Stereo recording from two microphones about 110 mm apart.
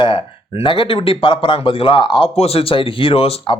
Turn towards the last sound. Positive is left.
turn(degrees=60)  # may be behind; listen again after turning